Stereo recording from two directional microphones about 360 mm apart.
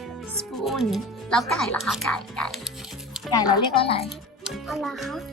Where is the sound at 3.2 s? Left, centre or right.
Centre.